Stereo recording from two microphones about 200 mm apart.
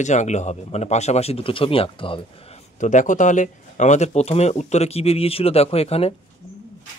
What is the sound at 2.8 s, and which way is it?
Speech, 40° left (ahead or behind).